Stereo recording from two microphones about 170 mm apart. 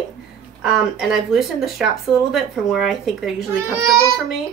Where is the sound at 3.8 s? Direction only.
20° right (ahead or behind).